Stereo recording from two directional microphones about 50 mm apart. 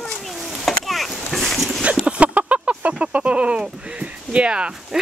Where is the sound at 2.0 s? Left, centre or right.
Right.